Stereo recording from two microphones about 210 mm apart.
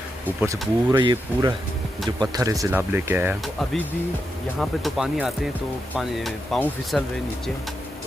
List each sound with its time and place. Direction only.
0.4 s speech: 20° right (ahead or behind)
4.6 s speech: centre (ahead or behind)